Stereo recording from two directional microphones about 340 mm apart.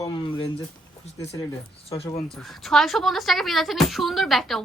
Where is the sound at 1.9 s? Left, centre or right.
Centre.